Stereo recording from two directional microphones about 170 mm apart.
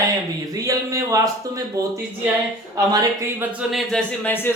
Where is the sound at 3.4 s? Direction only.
5° right (ahead or behind).